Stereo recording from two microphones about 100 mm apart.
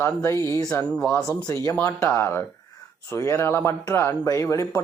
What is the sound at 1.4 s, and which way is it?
Speech, 35° left (ahead or behind).